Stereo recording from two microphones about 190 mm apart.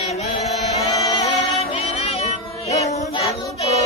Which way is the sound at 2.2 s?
35° left (ahead or behind).